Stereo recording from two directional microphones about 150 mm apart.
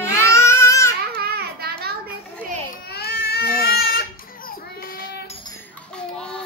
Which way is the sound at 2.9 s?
90° left.